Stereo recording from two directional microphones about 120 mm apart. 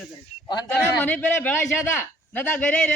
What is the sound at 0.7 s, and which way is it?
A man's voice, 15° left (ahead or behind).